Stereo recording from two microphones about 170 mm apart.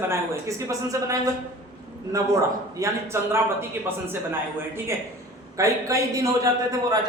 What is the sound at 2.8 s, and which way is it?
Speech, 20° right (ahead or behind).